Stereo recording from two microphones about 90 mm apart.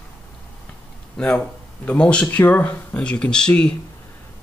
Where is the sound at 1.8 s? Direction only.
10° left (ahead or behind).